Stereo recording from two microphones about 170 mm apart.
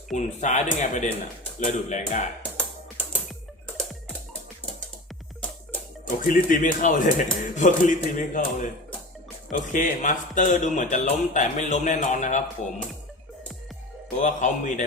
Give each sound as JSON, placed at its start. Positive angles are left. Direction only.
{"t": 0.2, "sound": "speech", "side_deg": 45}
{"t": 6.1, "sound": "speech", "side_deg": 50}
{"t": 14.2, "sound": "speech", "side_deg": 45}